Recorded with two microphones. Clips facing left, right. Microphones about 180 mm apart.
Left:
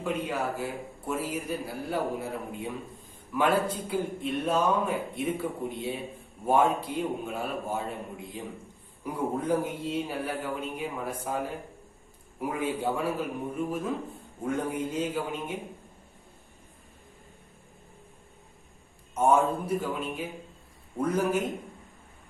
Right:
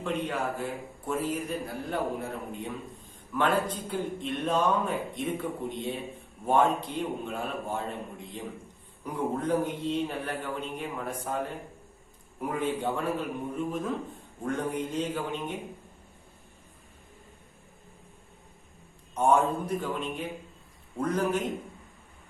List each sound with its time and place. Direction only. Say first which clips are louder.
0.0 s a man's voice: even; 10° left (ahead or behind)
19.1 s a man's voice: left 1 dB; 5° left (ahead or behind)